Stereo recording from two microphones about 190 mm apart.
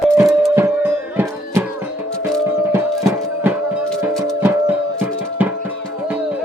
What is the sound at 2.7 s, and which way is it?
Music, 15° right (ahead or behind).